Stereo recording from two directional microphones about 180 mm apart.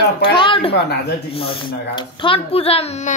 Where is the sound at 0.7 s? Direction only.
70° left (ahead or behind).